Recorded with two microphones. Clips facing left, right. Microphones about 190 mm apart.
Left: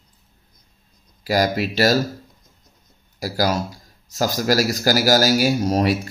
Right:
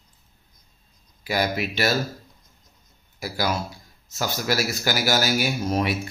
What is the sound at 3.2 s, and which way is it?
Speech, 40° left (ahead or behind).